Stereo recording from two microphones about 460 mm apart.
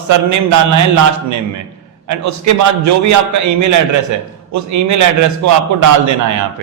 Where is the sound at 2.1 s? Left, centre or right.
Right.